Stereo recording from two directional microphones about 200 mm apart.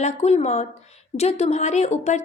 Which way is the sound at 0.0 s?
35° left (ahead or behind).